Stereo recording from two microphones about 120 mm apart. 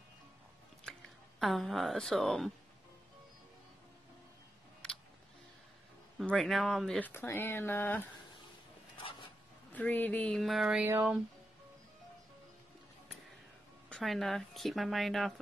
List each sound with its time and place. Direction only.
0.9 s a sound: 5° left (ahead or behind)
1.4 s speech: centre (ahead or behind)
6.2 s speech: centre (ahead or behind)
7.0 s speech: 20° left (ahead or behind)
8.9 s a sound: 45° left (ahead or behind)
9.7 s speech: 15° left (ahead or behind)
10.4 s speech: centre (ahead or behind)
13.8 s speech: centre (ahead or behind)